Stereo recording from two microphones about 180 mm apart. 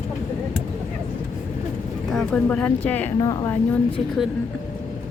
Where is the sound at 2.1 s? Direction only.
5° left (ahead or behind).